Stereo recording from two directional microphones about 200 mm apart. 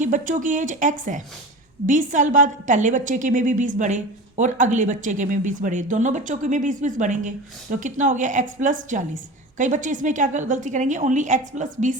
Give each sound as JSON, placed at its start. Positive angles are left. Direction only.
{"t": 0.0, "sound": "a woman's voice", "side_deg": -40}